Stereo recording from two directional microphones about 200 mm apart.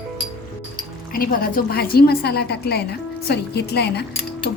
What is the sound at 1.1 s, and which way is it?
A woman's voice, 45° left (ahead or behind).